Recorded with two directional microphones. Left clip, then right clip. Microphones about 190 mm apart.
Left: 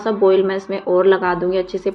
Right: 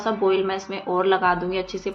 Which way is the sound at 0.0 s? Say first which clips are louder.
Left 6 dB; 20° left (ahead or behind).